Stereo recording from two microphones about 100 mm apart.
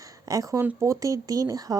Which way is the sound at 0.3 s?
35° right (ahead or behind).